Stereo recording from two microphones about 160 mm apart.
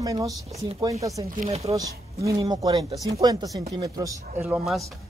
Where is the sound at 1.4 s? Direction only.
40° right (ahead or behind).